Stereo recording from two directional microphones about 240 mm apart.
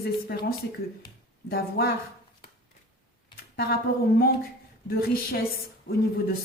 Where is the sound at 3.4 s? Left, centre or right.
Left.